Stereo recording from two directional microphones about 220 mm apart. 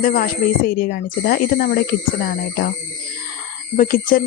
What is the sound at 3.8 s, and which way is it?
Speech, 40° left (ahead or behind).